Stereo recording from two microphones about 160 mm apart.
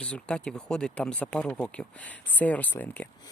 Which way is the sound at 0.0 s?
5° left (ahead or behind).